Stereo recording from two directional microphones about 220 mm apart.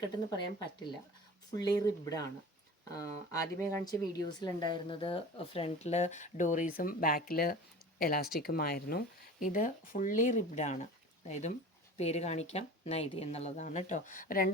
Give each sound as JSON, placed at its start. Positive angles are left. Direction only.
{"t": 1.5, "sound": "speech", "side_deg": 15}